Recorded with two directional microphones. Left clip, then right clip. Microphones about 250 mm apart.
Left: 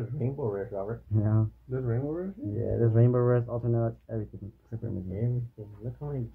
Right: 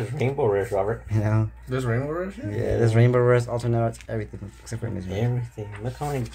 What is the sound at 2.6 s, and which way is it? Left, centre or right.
Speech, centre.